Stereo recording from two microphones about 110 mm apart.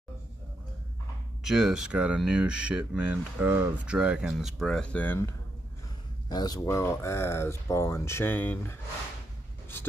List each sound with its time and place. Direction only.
1.4 s speech: 5° right (ahead or behind); by 5.2 s 15° left (ahead or behind)
6.2 s speech: 40° left (ahead or behind); by 8.7 s 20° left (ahead or behind)